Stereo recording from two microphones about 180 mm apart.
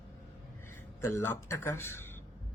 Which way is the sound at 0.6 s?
15° left (ahead or behind).